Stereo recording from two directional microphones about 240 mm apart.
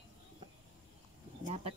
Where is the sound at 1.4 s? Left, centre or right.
Right.